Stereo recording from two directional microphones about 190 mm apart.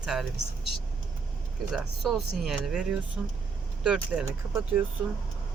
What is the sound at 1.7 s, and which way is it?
Speech, centre (ahead or behind).